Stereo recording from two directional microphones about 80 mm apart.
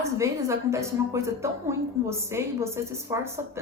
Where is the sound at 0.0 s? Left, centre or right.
Right.